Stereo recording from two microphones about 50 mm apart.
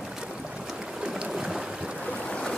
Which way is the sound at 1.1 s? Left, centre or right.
Centre.